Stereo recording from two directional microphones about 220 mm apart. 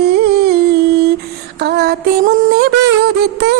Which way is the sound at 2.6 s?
45° right (ahead or behind).